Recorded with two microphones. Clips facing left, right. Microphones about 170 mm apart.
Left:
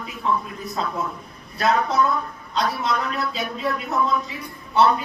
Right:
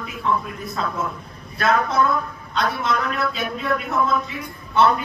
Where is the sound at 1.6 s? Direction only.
35° left (ahead or behind).